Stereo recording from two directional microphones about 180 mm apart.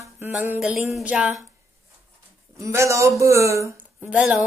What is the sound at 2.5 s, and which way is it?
Speech, 15° right (ahead or behind).